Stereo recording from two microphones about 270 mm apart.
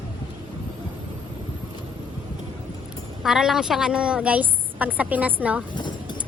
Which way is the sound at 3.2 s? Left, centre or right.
Centre.